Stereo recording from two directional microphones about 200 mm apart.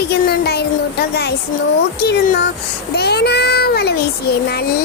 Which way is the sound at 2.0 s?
55° left (ahead or behind).